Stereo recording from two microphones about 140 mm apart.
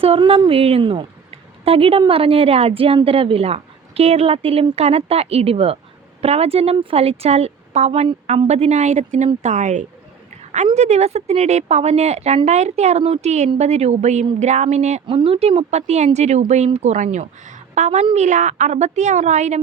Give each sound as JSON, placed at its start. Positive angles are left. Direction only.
{"t": 0.2, "sound": "a woman's voice", "side_deg": -35}
{"t": 15.0, "sound": "a woman's voice", "side_deg": -45}